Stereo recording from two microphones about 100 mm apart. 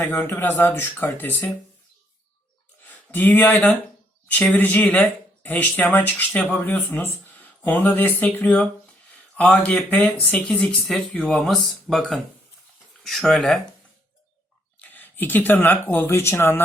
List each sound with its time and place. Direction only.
0.0 s speech: 20° left (ahead or behind)
2.8 s a man's voice: 15° left (ahead or behind)
14.8 s speech: 20° left (ahead or behind)